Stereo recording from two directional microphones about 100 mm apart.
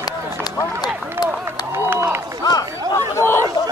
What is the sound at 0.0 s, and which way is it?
Run, 40° left (ahead or behind).